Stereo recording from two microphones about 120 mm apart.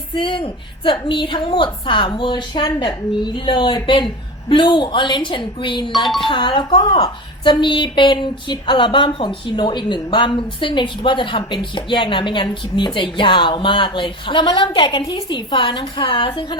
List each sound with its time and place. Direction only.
0.1 s speech: 45° left (ahead or behind)
5.9 s speech: centre (ahead or behind)
6.2 s speech: 45° left (ahead or behind)